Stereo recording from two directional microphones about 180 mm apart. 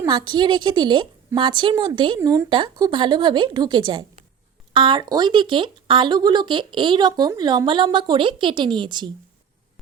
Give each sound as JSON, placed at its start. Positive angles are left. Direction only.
{"t": 0.0, "sound": "speech", "side_deg": -20}